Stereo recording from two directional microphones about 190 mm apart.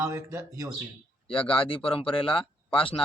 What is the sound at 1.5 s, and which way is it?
Speech, 30° left (ahead or behind).